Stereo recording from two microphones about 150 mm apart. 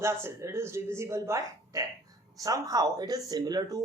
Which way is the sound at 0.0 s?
15° right (ahead or behind).